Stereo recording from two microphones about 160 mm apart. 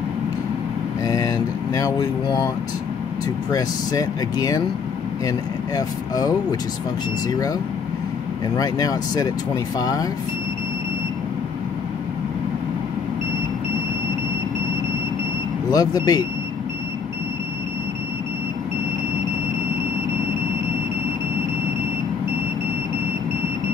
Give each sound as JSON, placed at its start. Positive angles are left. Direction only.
{"t": 1.0, "sound": "a sound", "side_deg": 20}
{"t": 3.5, "sound": "speech", "side_deg": 20}
{"t": 5.8, "sound": "speech", "side_deg": 25}
{"t": 8.5, "sound": "speech", "side_deg": 20}
{"t": 15.7, "sound": "speech", "side_deg": 25}